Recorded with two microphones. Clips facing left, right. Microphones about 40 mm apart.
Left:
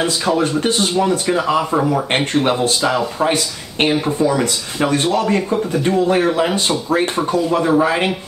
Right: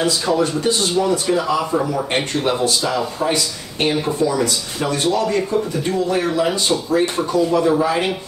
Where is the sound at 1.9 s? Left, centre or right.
Left.